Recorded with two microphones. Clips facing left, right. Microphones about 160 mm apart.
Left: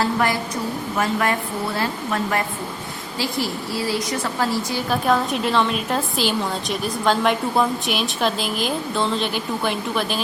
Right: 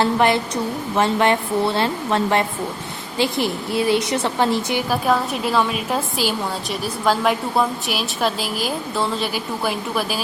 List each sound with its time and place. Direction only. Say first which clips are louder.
0.0 s a woman's voice: right 4 dB; 25° right (ahead or behind)
4.9 s a woman's voice: left 2 dB; 5° right (ahead or behind)